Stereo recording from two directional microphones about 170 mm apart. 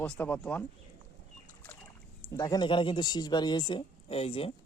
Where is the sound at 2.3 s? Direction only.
20° left (ahead or behind).